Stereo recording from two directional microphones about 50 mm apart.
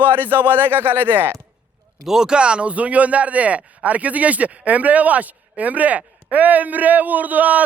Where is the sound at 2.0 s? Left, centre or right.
Centre; by 7.6 s right.